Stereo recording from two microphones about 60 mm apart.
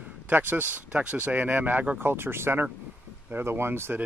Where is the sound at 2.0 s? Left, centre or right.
Right.